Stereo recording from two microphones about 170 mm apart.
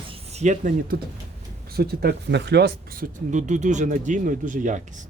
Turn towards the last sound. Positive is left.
turn(degrees=-45)  # may be behind; listen again after turning